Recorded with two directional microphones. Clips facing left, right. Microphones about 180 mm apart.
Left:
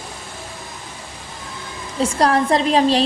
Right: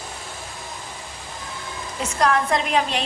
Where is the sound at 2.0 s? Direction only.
30° left (ahead or behind).